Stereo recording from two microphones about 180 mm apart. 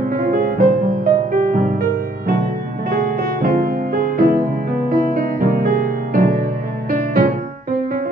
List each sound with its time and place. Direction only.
0.1 s music: 50° right (ahead or behind)
2.9 s music: 55° right (ahead or behind)